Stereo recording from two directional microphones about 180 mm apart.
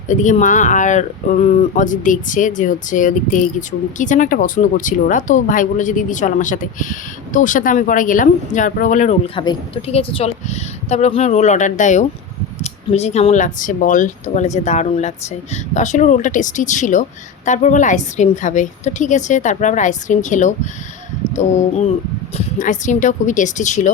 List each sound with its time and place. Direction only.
0.1 s speech: 45° left (ahead or behind)
22.4 s speech: 45° left (ahead or behind)